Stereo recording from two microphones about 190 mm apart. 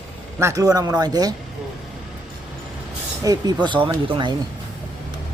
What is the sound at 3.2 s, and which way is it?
Speech, 20° right (ahead or behind).